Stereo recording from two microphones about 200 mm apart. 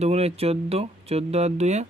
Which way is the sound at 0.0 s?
30° right (ahead or behind).